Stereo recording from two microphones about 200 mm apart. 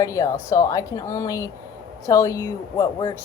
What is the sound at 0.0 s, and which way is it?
A woman's voice, 15° left (ahead or behind).